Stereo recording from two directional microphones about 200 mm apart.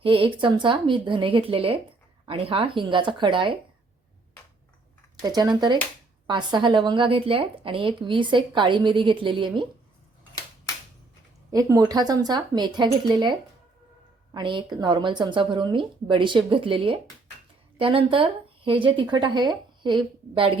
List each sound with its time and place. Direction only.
0.0 s a woman's voice: 25° right (ahead or behind)
5.2 s a woman's voice: 20° right (ahead or behind)
11.5 s a woman's voice: 15° right (ahead or behind)
14.3 s a woman's voice: 25° right (ahead or behind)